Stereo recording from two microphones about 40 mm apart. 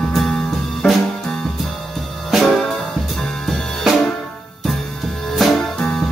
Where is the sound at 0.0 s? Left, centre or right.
Centre.